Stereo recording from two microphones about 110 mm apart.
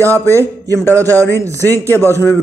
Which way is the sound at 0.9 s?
30° right (ahead or behind).